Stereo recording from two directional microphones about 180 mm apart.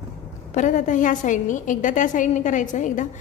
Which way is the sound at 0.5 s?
45° left (ahead or behind).